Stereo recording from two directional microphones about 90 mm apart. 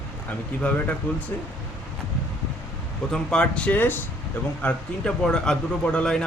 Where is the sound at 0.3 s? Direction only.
15° left (ahead or behind).